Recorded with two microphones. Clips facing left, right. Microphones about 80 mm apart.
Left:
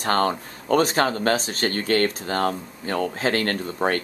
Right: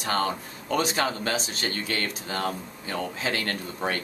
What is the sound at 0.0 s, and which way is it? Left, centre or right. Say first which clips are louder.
Speech: left 5 dB; left.